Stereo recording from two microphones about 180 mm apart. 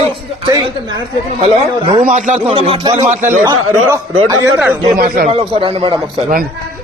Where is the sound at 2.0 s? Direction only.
45° right (ahead or behind).